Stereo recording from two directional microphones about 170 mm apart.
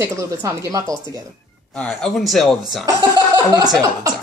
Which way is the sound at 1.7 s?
5° left (ahead or behind).